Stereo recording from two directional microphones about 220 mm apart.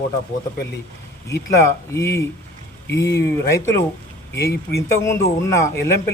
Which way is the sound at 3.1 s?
50° left (ahead or behind).